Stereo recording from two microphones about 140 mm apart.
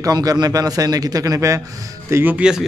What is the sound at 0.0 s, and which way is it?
A man's voice, 25° right (ahead or behind).